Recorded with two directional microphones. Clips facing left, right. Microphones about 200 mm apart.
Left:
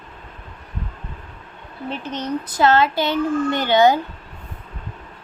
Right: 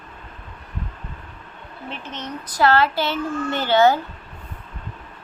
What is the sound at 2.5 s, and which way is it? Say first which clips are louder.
A child's voice: left 1 dB; 20° left (ahead or behind).